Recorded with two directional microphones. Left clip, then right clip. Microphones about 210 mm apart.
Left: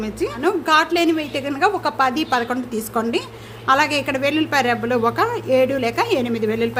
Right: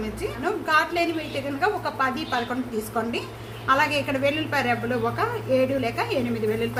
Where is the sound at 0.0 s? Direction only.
55° left (ahead or behind).